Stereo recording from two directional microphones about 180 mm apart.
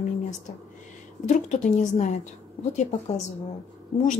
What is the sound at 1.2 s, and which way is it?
Speech, 40° left (ahead or behind).